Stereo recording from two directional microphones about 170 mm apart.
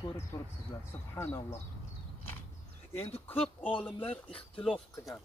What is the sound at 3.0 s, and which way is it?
Speech, 35° left (ahead or behind).